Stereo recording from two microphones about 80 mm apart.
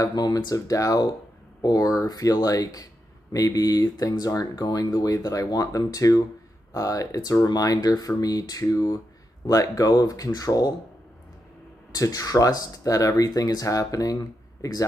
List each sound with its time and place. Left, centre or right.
0.0 s speech: left
11.9 s speech: left